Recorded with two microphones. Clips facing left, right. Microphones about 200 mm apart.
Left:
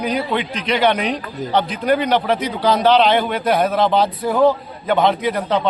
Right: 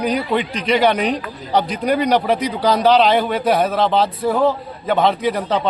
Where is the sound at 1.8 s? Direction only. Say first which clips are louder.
Even; 10° right (ahead or behind).